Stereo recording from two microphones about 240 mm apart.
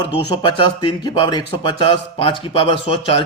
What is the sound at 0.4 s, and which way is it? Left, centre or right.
A man's voice, centre.